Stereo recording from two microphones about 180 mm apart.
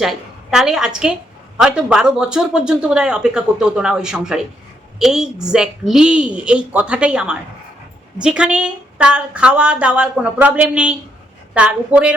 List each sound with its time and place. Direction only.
0.0 s a woman's voice: centre (ahead or behind)